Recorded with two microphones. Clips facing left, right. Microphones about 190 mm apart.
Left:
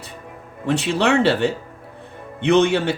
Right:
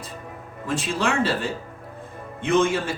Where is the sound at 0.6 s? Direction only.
70° left (ahead or behind).